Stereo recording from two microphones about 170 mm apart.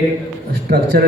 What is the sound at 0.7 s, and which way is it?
Speech, 65° right (ahead or behind).